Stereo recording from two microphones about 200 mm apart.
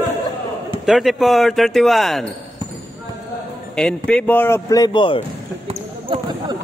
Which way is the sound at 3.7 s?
5° left (ahead or behind).